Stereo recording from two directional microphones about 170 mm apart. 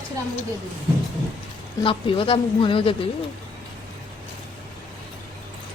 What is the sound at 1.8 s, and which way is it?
Speech, 30° left (ahead or behind).